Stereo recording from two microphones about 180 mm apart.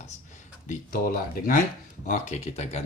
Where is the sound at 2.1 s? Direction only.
40° left (ahead or behind).